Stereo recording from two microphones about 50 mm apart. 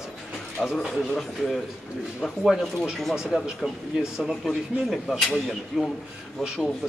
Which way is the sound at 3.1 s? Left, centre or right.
Centre.